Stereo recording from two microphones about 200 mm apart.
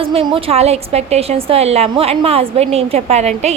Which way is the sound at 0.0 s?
25° right (ahead or behind).